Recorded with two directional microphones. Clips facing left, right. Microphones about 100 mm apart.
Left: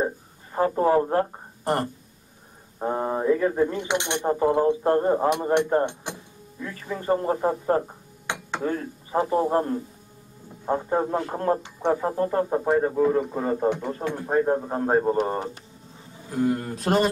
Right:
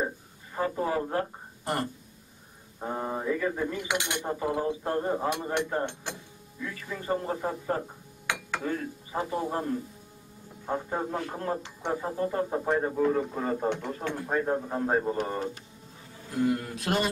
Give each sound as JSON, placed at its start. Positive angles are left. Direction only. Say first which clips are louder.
{"t": 0.0, "sound": "a sound", "louder": "left 5 dB", "side_deg": 40}
{"t": 2.8, "sound": "speech", "louder": "left 7 dB", "side_deg": 40}
{"t": 12.4, "sound": "speech", "louder": "left 5 dB", "side_deg": 30}
{"t": 13.0, "sound": "a man's voice", "louder": "left 4 dB", "side_deg": 15}
{"t": 14.2, "sound": "speech", "louder": "left 6 dB", "side_deg": 30}